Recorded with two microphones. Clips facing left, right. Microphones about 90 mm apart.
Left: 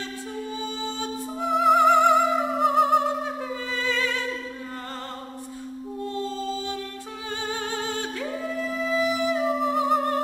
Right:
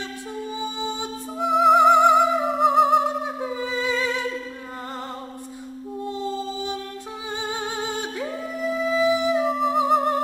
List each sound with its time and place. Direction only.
0.6 s music: 15° right (ahead or behind)
1.4 s music: centre (ahead or behind); by 4.2 s 20° right (ahead or behind)
6.2 s music: 15° right (ahead or behind)
9.4 s music: centre (ahead or behind)